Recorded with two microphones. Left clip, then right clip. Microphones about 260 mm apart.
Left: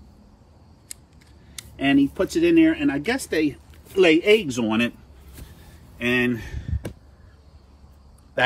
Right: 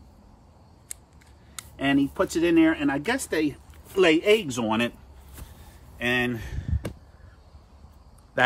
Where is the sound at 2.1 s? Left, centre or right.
Centre.